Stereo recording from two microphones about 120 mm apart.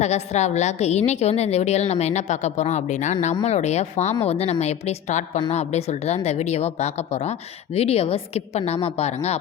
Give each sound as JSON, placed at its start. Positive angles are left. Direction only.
{"t": 0.0, "sound": "a woman's voice", "side_deg": 70}
{"t": 3.4, "sound": "a woman's voice", "side_deg": 65}